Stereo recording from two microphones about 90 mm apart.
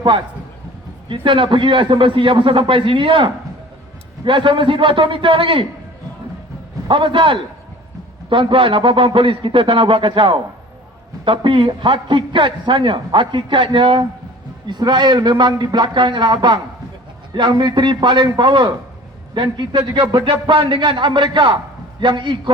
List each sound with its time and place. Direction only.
1.0 s a man's voice: 70° right (ahead or behind)
6.8 s a man's voice: 70° right (ahead or behind)
14.7 s a man's voice: 55° right (ahead or behind)